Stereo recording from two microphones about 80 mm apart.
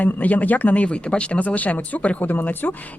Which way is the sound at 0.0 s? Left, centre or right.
Centre.